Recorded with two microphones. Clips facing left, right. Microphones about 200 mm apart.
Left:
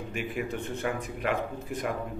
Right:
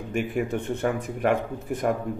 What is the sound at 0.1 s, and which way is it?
Speech, 50° right (ahead or behind).